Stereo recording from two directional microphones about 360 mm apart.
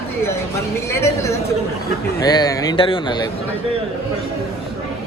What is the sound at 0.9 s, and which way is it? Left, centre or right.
Speech, centre.